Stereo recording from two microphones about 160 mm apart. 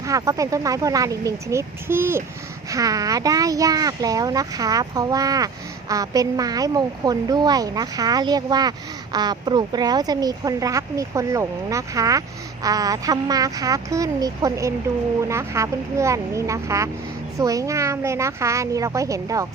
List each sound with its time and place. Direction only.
0.0 s speech: 20° right (ahead or behind)